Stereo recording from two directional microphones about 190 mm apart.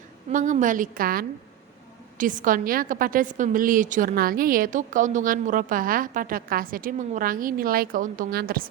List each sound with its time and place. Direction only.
0.3 s a woman's voice: 40° right (ahead or behind)